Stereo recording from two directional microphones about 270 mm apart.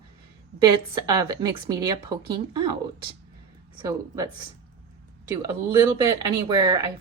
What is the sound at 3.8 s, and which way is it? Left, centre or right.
Speech, centre.